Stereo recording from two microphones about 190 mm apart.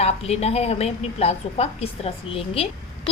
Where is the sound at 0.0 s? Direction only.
35° left (ahead or behind).